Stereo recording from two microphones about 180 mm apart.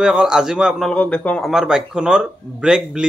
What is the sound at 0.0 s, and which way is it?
A man's voice, 5° right (ahead or behind).